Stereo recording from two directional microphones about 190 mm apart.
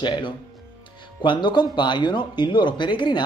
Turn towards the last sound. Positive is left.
turn(degrees=25)  # may be behind; listen again after turning